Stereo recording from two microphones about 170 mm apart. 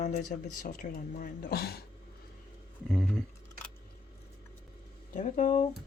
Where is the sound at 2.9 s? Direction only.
Centre (ahead or behind).